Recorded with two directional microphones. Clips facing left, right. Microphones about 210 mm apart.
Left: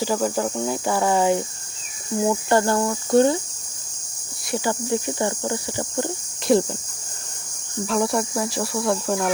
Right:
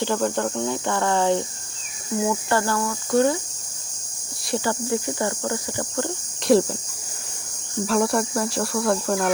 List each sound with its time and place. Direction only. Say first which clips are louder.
0.0 s speech: even; 5° left (ahead or behind)
2.2 s cricket: left 4 dB; 20° left (ahead or behind)
4.5 s cricket: even; 15° left (ahead or behind)
6.5 s speech: right 1 dB; centre (ahead or behind)
7.9 s speech: right 1 dB; centre (ahead or behind)